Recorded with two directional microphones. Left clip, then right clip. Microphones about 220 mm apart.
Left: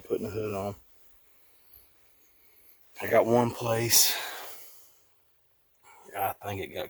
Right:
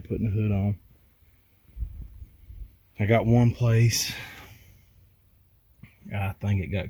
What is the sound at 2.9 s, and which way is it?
Speech, 15° left (ahead or behind).